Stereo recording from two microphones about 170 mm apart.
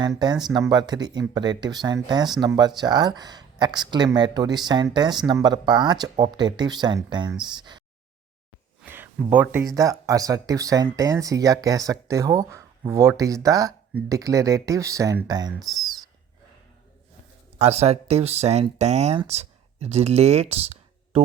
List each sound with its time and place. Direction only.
0.0 s speech: 25° right (ahead or behind)
8.8 s a sound: 10° right (ahead or behind)
9.3 s speech: 10° right (ahead or behind)
17.6 s speech: 40° right (ahead or behind)